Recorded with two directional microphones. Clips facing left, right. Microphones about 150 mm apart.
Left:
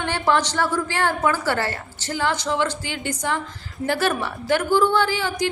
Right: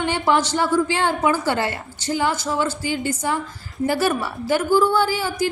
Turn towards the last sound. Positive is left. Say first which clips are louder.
# right 1 dB
turn(degrees=-5)  # may be behind; listen again after turning